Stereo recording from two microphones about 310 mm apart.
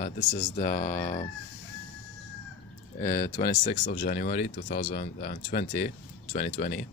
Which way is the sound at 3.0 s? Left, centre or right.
Left.